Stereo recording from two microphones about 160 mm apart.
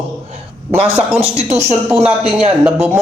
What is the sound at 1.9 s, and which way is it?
Speech, 5° right (ahead or behind).